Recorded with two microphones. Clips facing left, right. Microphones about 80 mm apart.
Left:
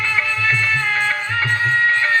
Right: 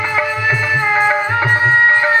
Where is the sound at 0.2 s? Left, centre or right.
Centre.